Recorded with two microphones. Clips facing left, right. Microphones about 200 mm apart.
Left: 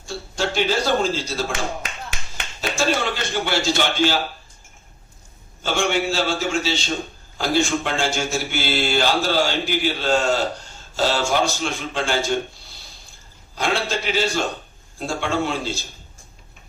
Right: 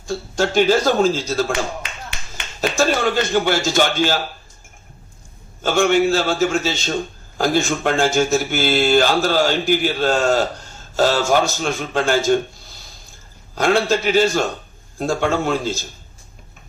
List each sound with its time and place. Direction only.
0.3 s speech: 45° right (ahead or behind)
2.6 s speech: 45° right (ahead or behind)
5.6 s speech: 45° right (ahead or behind)
13.6 s speech: 50° right (ahead or behind)